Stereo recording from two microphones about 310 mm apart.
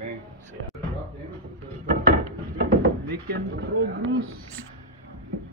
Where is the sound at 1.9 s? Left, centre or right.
Right.